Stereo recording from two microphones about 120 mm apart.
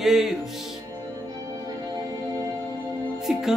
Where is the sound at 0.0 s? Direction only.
Centre (ahead or behind).